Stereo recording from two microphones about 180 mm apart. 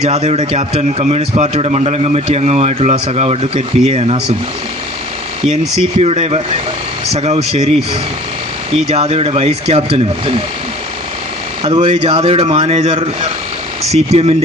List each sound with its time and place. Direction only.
0.0 s a man's voice: 35° right (ahead or behind)
6.0 s a man's voice: 35° right (ahead or behind)
8.9 s a man's voice: 35° right (ahead or behind)
11.6 s a man's voice: 30° right (ahead or behind)